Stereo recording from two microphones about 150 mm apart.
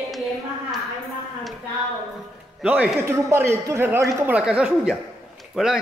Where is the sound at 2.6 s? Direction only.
10° right (ahead or behind).